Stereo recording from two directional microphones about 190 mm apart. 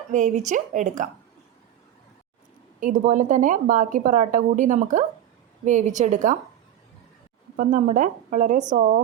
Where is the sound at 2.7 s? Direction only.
40° right (ahead or behind).